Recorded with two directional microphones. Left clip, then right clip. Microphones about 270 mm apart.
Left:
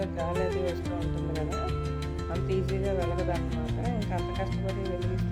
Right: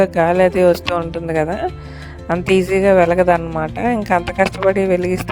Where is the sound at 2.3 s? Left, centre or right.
Right.